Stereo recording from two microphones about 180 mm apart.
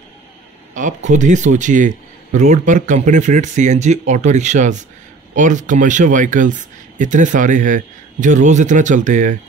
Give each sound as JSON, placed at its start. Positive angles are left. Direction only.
{"t": 0.7, "sound": "a man's voice", "side_deg": -45}